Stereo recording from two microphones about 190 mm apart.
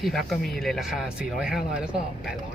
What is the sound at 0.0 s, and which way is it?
Speech, centre (ahead or behind).